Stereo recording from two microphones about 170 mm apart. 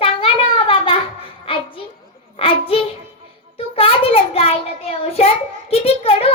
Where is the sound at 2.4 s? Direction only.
35° left (ahead or behind).